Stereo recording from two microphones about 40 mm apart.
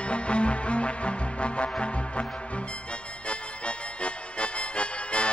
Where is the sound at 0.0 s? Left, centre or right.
Left.